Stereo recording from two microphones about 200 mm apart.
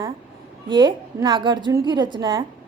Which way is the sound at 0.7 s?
25° right (ahead or behind).